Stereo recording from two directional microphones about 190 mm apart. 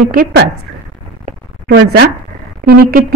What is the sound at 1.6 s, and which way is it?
Speech, 65° right (ahead or behind).